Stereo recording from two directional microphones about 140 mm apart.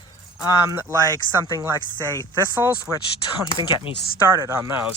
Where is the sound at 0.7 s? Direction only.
20° right (ahead or behind).